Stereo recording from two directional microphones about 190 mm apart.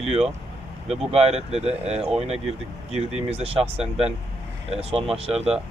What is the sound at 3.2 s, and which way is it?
Speech, 30° right (ahead or behind).